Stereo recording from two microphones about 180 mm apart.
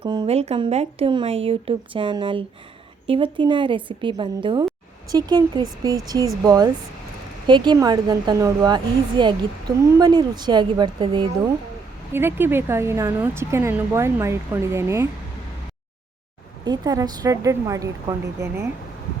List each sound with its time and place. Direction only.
0.0 s a woman's voice: 30° right (ahead or behind)
12.1 s speech: 10° right (ahead or behind)
16.6 s a woman's voice: 20° right (ahead or behind)